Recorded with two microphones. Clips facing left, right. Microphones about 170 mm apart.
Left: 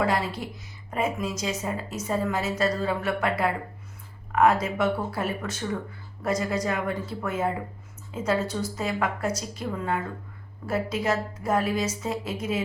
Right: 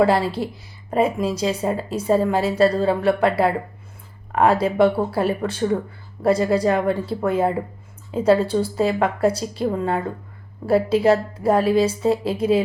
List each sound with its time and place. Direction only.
0.0 s speech: 30° right (ahead or behind)